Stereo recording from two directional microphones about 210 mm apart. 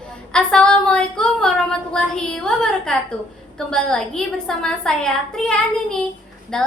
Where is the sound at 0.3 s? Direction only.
5° left (ahead or behind).